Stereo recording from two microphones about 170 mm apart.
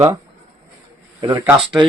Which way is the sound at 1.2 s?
25° right (ahead or behind).